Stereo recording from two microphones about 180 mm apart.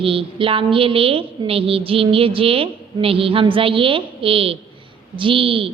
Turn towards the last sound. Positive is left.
turn(degrees=-30)  # may be behind; listen again after turning